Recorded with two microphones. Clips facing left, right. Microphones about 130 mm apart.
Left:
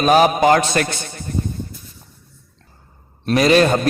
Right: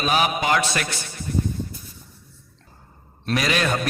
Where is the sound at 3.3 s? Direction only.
35° left (ahead or behind).